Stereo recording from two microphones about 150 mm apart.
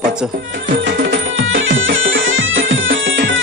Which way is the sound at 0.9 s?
80° right.